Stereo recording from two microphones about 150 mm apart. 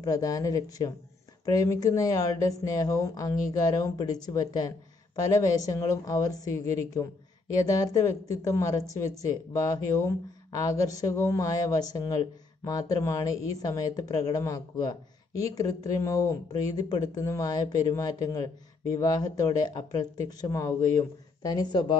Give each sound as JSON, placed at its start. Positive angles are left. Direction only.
{"t": 0.0, "sound": "speech", "side_deg": 25}